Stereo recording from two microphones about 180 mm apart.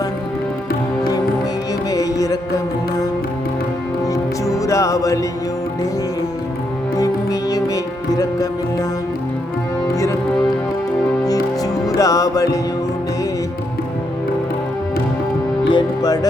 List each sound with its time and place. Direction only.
1.9 s music: 20° left (ahead or behind)
4.0 s music: 20° left (ahead or behind)
7.0 s music: 20° left (ahead or behind)
9.9 s music: 20° left (ahead or behind)
11.9 s music: 20° left (ahead or behind)
15.7 s speech: 20° left (ahead or behind)